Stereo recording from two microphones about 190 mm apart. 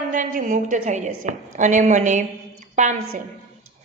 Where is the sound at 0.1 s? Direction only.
45° right (ahead or behind).